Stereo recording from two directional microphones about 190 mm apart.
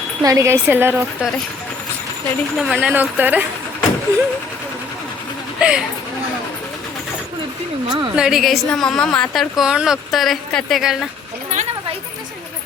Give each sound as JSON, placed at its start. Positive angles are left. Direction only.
{"t": 0.2, "sound": "speech", "side_deg": -15}
{"t": 2.6, "sound": "speech", "side_deg": -5}
{"t": 5.5, "sound": "speech", "side_deg": -5}
{"t": 7.9, "sound": "a woman's voice", "side_deg": -25}
{"t": 8.1, "sound": "a woman's voice", "side_deg": -5}